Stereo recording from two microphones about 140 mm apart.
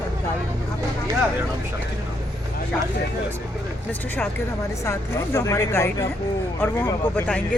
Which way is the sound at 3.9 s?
10° left (ahead or behind).